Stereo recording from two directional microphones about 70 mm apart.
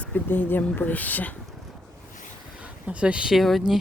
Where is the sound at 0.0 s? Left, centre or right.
Left.